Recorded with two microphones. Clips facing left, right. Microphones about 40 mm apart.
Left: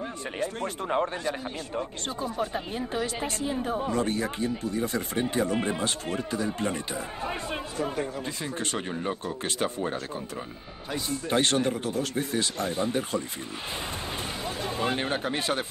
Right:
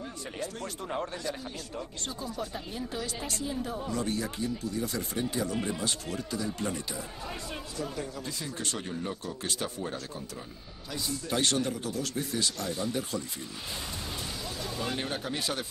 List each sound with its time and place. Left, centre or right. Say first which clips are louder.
0.4 s speech: left 6 dB; left
14.4 s speech: left 7 dB; left